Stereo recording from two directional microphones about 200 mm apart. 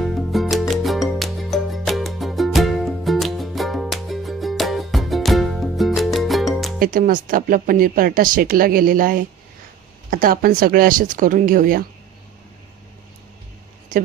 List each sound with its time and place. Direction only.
0.0 s music: centre (ahead or behind)
6.8 s speech: 45° right (ahead or behind)